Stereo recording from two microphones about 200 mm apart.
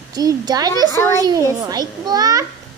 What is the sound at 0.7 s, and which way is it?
Speech, 15° left (ahead or behind).